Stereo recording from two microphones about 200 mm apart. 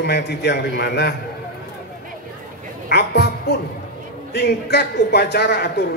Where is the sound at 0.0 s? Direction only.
60° left (ahead or behind).